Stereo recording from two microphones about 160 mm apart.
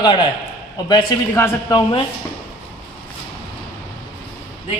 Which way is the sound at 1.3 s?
15° left (ahead or behind).